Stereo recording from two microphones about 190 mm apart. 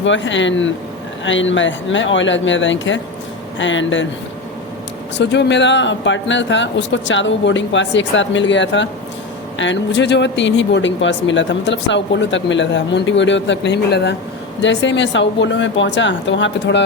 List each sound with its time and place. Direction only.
0.0 s speech: 75° left (ahead or behind)
5.1 s speech: 65° left (ahead or behind)